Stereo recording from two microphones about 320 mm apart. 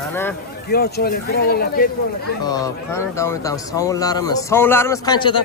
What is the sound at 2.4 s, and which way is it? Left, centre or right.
Speech, centre.